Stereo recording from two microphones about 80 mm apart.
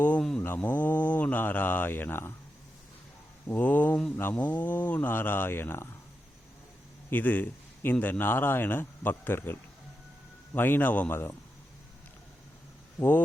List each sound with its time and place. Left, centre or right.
0.2 s mantra: centre
0.4 s speech: left
3.4 s speech: left
7.1 s a man's voice: left
13.0 s speech: left